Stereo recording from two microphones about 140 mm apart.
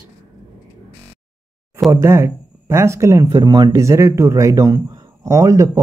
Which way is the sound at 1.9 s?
20° right (ahead or behind).